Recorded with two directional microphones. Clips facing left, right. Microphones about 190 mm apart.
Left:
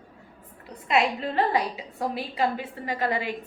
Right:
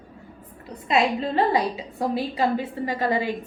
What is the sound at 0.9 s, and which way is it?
A woman's voice, 30° right (ahead or behind).